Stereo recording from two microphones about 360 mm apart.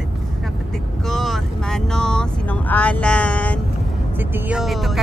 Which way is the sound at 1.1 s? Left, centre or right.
Centre.